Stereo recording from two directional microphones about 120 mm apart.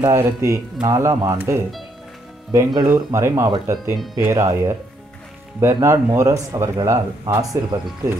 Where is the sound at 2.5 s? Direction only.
35° right (ahead or behind).